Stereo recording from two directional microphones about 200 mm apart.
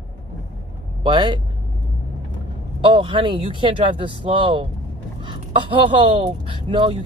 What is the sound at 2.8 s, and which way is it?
Speech, 25° right (ahead or behind).